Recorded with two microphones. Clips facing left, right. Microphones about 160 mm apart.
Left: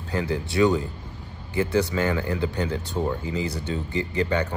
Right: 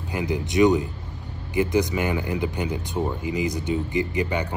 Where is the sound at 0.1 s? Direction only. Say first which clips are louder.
Right 1 dB; 15° right (ahead or behind).